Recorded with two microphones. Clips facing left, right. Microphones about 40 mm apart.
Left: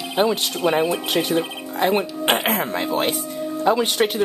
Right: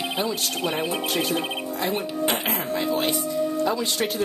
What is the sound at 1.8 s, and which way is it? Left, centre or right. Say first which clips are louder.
Speech: left 7 dB; left.